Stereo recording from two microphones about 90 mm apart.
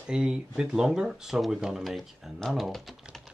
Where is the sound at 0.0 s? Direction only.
10° right (ahead or behind).